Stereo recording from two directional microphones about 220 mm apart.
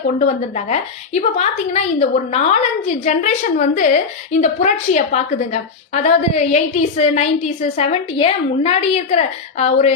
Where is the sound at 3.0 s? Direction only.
30° left (ahead or behind).